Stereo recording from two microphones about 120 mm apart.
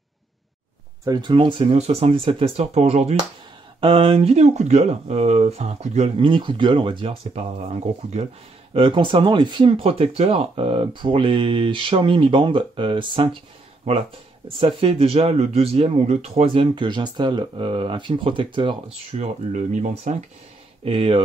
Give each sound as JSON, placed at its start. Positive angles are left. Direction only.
{"t": 1.0, "sound": "speech", "side_deg": -35}
{"t": 3.8, "sound": "speech", "side_deg": -50}
{"t": 8.7, "sound": "speech", "side_deg": -45}
{"t": 14.8, "sound": "speech", "side_deg": -55}
{"t": 19.1, "sound": "speech", "side_deg": -80}
{"t": 20.8, "sound": "speech", "side_deg": -50}